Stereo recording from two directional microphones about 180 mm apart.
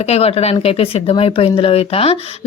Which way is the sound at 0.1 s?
35° left (ahead or behind).